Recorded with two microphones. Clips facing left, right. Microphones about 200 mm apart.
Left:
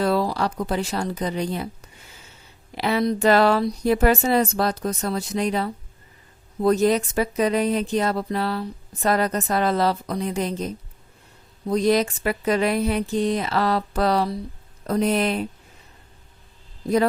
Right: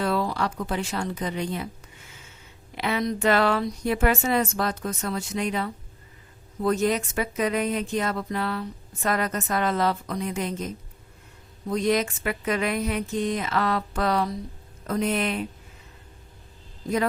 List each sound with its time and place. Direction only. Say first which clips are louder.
0.0 s speech: left 4 dB; 35° left (ahead or behind)
2.7 s speech: left 4 dB; 35° left (ahead or behind)